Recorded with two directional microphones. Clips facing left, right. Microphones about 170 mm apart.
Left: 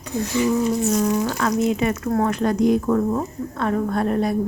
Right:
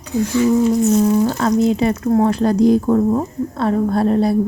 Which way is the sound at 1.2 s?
30° right (ahead or behind).